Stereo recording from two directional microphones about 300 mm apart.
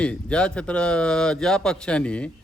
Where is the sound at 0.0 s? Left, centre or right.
Centre.